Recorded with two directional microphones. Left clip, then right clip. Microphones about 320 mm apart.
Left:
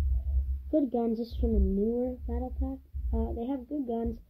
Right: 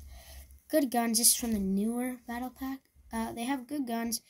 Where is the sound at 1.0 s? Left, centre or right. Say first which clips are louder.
Right 2 dB; right.